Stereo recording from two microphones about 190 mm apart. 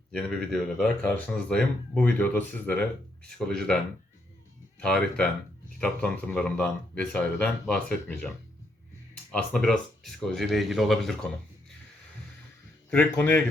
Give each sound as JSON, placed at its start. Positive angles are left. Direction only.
{"t": 0.1, "sound": "speech", "side_deg": 5}
{"t": 4.8, "sound": "speech", "side_deg": 5}
{"t": 9.3, "sound": "speech", "side_deg": 5}
{"t": 12.9, "sound": "speech", "side_deg": 10}